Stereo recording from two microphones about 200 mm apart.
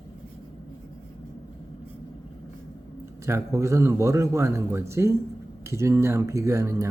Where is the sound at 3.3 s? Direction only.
15° right (ahead or behind).